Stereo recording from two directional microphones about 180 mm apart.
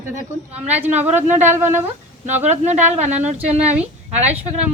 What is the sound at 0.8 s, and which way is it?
A woman's voice, 10° right (ahead or behind).